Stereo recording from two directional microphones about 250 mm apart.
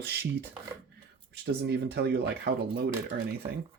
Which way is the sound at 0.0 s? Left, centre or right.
Right.